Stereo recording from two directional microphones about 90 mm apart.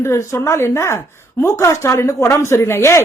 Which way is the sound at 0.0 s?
30° left (ahead or behind).